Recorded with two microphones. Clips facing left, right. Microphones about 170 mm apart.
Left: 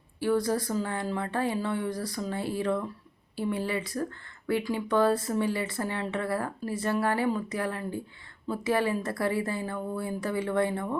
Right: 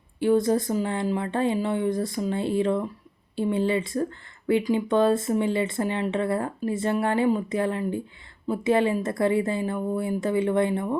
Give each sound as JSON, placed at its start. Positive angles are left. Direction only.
{"t": 0.2, "sound": "speech", "side_deg": -20}